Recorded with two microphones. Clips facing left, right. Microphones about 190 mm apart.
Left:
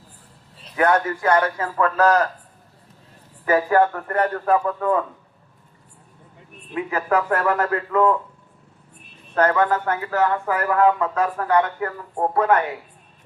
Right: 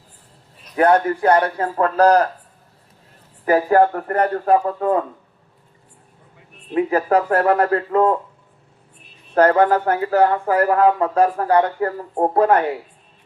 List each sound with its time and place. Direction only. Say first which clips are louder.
0.8 s speech: right 4 dB; 35° right (ahead or behind)
3.4 s speech: right 3 dB; 35° right (ahead or behind)
6.7 s speech: right 5 dB; 35° right (ahead or behind)
9.3 s speech: right 5 dB; 35° right (ahead or behind)